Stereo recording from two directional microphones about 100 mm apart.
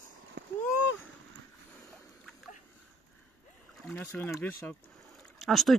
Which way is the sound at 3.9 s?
15° left (ahead or behind).